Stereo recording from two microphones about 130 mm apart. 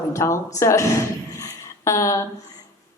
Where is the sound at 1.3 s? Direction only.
25° left (ahead or behind).